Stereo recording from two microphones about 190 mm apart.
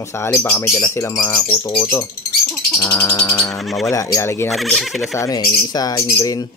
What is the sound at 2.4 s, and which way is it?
Bird, centre (ahead or behind).